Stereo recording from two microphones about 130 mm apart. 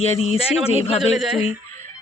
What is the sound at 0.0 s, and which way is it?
Speech, 55° left (ahead or behind).